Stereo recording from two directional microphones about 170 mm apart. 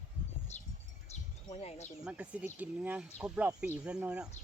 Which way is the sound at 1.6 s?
40° left (ahead or behind).